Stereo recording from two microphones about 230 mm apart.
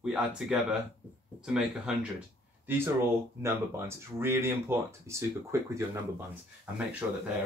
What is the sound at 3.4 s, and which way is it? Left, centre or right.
Speech, centre.